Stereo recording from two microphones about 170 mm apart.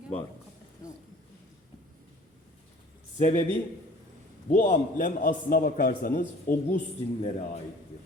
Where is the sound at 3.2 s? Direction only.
40° left (ahead or behind).